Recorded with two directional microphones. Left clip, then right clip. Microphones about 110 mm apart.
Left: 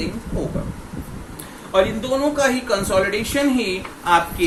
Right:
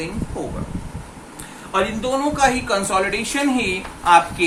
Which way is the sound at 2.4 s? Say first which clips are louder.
Right 1 dB; centre (ahead or behind).